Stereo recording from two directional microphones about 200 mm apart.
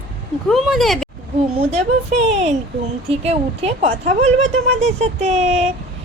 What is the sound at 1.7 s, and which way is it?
A woman's voice, 35° right (ahead or behind).